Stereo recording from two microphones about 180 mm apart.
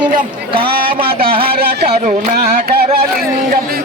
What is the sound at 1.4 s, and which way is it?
Carnatic music, 55° right (ahead or behind).